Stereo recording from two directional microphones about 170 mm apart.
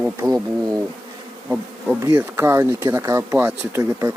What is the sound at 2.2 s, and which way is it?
Speech, 15° right (ahead or behind).